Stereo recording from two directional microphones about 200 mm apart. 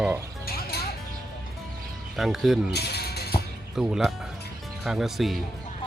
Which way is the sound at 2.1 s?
Centre (ahead or behind).